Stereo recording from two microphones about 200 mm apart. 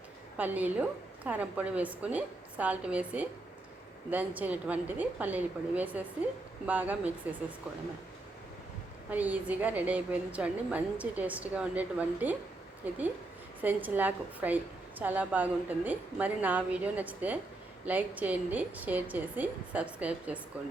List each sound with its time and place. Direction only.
0.3 s a woman's voice: 10° right (ahead or behind)
9.0 s a woman's voice: 10° right (ahead or behind)